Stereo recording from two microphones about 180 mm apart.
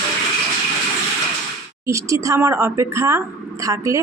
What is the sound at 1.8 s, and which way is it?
Speech, 15° right (ahead or behind).